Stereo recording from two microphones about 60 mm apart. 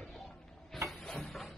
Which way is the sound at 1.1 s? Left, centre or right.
Centre.